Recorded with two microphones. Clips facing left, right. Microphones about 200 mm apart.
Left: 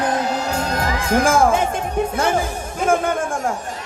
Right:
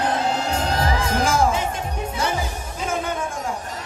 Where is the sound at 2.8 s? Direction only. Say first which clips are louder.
Left 7 dB; 50° left (ahead or behind).